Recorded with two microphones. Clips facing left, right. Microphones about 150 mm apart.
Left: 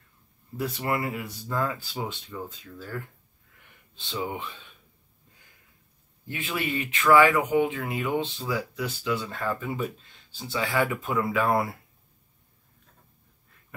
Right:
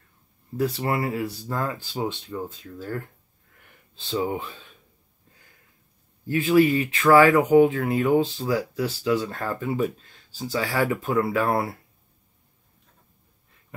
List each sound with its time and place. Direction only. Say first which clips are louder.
0.6 s speech: right 4 dB; 30° right (ahead or behind)
3.9 s speech: right 6 dB; 35° right (ahead or behind)
6.3 s speech: right 12 dB; 35° right (ahead or behind)